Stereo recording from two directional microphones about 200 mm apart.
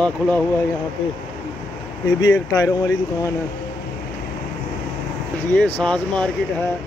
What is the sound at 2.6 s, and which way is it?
Speech, 15° left (ahead or behind).